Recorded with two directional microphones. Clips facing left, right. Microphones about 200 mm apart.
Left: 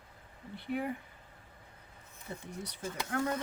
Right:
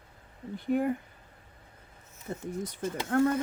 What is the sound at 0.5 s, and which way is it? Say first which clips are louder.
Speech: right 8 dB; 45° right (ahead or behind).